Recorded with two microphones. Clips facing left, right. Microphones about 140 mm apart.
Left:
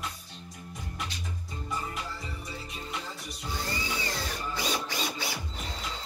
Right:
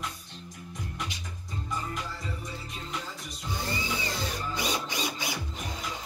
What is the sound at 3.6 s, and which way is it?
Tools, 20° right (ahead or behind).